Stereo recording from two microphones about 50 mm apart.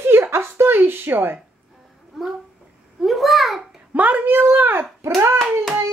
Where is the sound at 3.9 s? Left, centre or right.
Right.